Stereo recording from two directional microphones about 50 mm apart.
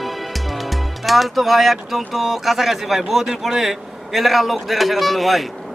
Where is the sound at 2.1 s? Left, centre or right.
Centre.